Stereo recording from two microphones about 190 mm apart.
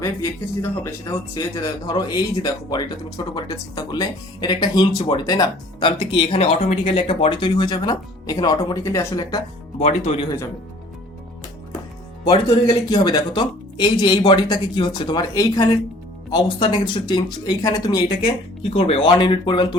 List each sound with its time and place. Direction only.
0.0 s speech: 15° left (ahead or behind)
9.8 s speech: 35° left (ahead or behind)
12.2 s speech: 25° left (ahead or behind)
18.7 s speech: 30° left (ahead or behind)